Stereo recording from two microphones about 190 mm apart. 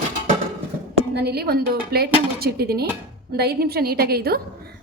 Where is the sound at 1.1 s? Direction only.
55° right (ahead or behind).